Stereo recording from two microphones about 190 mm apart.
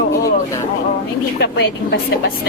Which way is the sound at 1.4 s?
65° left (ahead or behind).